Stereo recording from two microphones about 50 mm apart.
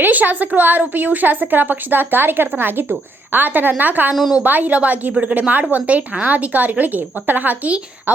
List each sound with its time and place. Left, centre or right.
0.0 s a woman's voice: right
4.1 s a woman's voice: centre
4.4 s a woman's voice: right